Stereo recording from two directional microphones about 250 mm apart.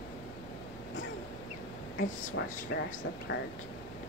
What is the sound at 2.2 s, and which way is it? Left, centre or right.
Speech, left.